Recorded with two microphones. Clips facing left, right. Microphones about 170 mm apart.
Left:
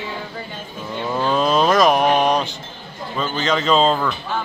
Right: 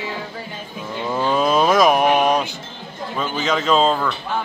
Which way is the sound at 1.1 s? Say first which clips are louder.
Even; 5° right (ahead or behind).